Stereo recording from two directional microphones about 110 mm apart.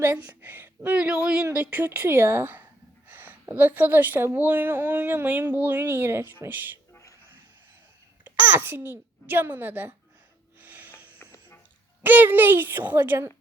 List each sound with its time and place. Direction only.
0.3 s a woman's voice: 15° right (ahead or behind)
8.2 s a child's voice: 20° right (ahead or behind)
10.6 s music: 20° right (ahead or behind)
11.2 s music: 20° left (ahead or behind)
12.0 s a woman's voice: 20° right (ahead or behind)